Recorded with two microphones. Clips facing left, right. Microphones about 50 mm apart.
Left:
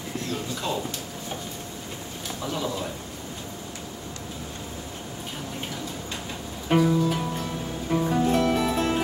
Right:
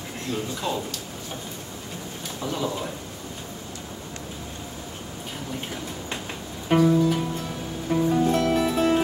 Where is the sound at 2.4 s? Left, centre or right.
Centre.